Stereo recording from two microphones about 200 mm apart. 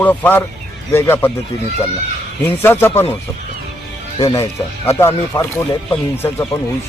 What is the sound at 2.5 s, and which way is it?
Speech, 10° left (ahead or behind).